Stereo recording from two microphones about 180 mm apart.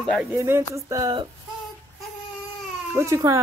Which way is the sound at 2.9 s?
15° right (ahead or behind).